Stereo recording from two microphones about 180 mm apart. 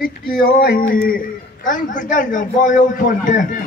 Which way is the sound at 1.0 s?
50° left (ahead or behind).